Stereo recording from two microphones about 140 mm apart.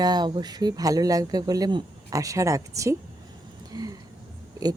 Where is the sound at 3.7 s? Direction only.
25° right (ahead or behind).